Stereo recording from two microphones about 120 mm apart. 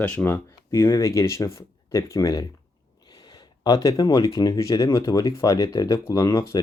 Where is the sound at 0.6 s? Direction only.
25° left (ahead or behind).